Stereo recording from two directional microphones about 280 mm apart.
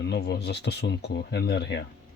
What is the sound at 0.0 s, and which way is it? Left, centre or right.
Speech, left.